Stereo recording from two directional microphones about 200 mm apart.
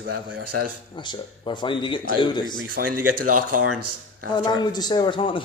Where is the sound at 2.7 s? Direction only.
45° right (ahead or behind).